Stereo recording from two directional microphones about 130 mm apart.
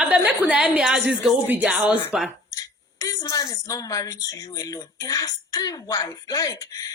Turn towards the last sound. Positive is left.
turn(degrees=30)  # may be behind; listen again after turning